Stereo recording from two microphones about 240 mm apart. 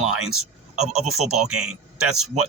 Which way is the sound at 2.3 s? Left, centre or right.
Right.